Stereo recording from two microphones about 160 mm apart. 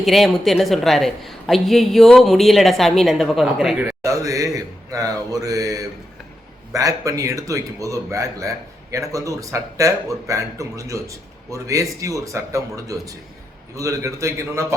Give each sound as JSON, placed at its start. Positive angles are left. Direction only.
{"t": 0.0, "sound": "a woman's voice", "side_deg": 0}
{"t": 4.0, "sound": "speech", "side_deg": -20}